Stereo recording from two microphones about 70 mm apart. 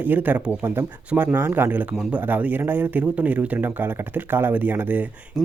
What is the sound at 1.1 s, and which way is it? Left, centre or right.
Speech, centre.